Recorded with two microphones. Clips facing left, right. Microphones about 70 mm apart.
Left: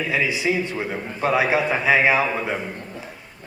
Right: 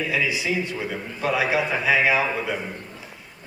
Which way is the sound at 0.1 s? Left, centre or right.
Left.